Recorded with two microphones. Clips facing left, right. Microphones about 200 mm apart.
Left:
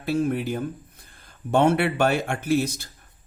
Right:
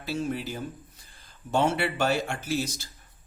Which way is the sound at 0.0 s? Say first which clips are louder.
Left 7 dB; 55° left (ahead or behind).